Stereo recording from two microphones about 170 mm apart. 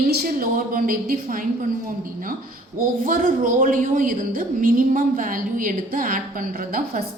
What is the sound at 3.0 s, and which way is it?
A woman's voice, 55° right (ahead or behind).